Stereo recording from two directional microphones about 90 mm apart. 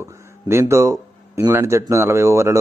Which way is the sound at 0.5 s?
30° right (ahead or behind).